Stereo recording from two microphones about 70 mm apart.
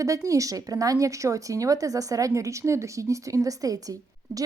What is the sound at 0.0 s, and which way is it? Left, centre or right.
A woman's voice, right.